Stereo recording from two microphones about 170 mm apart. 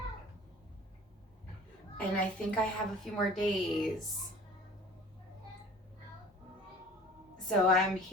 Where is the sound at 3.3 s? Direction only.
Centre (ahead or behind).